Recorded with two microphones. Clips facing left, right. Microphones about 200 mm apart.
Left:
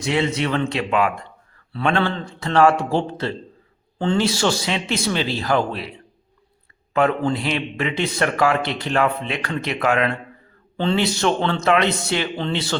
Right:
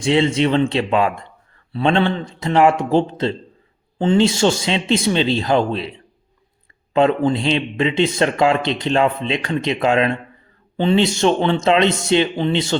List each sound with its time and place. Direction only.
0.0 s a man's voice: 25° right (ahead or behind)
6.9 s a man's voice: 25° right (ahead or behind)